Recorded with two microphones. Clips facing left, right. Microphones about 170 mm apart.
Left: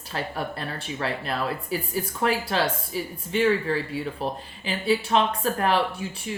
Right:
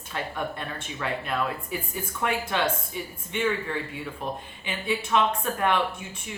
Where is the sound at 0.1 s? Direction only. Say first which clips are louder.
Left 1 dB; 35° left (ahead or behind).